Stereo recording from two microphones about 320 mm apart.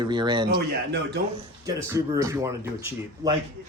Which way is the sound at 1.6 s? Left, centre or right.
Centre.